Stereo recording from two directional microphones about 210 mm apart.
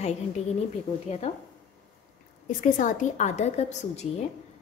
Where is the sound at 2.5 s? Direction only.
40° left (ahead or behind).